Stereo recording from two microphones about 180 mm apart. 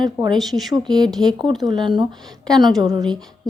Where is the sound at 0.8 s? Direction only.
20° right (ahead or behind).